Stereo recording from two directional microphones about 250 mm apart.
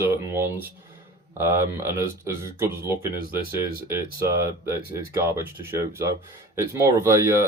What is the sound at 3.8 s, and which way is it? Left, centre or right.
Speech, centre.